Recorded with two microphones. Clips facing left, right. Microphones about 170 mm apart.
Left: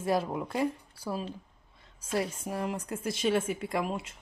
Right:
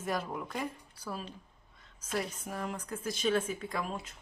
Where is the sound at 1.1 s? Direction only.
25° left (ahead or behind).